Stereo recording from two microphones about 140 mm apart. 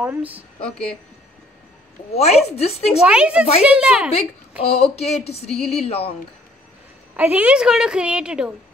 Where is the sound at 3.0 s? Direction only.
5° right (ahead or behind).